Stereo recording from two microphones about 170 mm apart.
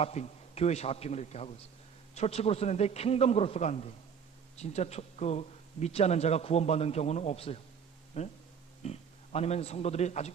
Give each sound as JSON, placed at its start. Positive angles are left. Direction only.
{"t": 0.0, "sound": "a man's voice", "side_deg": 40}